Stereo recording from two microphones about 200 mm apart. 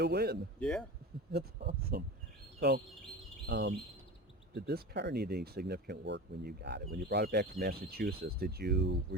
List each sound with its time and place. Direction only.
0.0 s speech: 55° right (ahead or behind)
0.6 s speech: 5° left (ahead or behind)
1.3 s speech: 50° right (ahead or behind)